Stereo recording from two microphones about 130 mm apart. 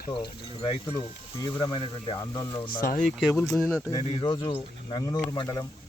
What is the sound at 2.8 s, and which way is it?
Speech, 90° left.